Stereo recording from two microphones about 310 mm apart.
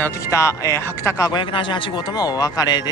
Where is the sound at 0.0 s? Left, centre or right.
Centre.